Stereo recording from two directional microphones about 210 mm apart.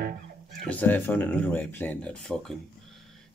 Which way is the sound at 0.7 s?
10° left (ahead or behind).